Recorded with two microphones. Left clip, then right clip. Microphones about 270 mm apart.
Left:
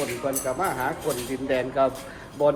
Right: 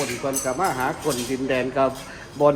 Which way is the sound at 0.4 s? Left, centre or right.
Right.